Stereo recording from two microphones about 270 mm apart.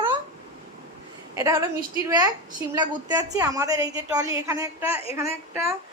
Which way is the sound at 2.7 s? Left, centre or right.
Centre.